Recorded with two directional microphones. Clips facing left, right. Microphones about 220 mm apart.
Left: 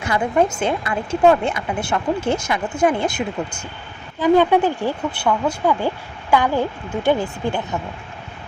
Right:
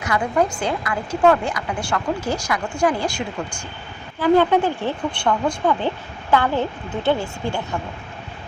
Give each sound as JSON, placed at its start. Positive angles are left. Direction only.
{"t": 0.0, "sound": "speech", "side_deg": 25}